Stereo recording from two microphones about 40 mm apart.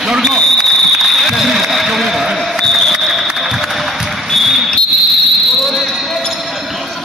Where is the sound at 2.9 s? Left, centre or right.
Centre.